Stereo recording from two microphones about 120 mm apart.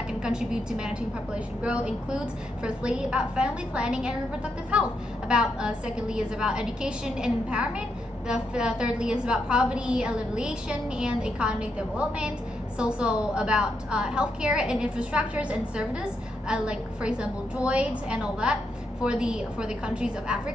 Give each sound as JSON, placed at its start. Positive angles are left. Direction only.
{"t": 0.2, "sound": "a woman's voice", "side_deg": -5}
{"t": 12.7, "sound": "a woman's voice", "side_deg": -10}